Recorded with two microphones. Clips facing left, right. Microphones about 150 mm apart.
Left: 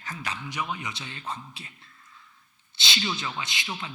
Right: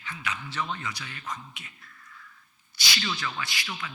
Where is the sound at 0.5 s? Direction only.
10° left (ahead or behind).